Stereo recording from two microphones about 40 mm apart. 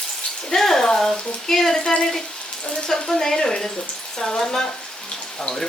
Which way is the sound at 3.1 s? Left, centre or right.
Centre.